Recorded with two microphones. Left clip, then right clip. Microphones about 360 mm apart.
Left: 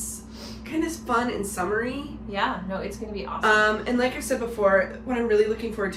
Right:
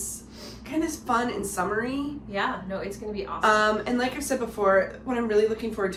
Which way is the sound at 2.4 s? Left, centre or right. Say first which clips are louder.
Left 2 dB; centre.